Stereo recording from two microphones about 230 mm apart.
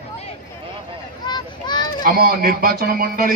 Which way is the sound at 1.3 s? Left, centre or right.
Centre.